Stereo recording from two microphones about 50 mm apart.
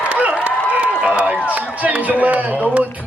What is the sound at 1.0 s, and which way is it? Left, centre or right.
Run, right.